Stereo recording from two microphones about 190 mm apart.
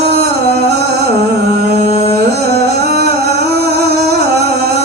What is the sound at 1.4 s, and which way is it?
Carnatic music, 60° right (ahead or behind).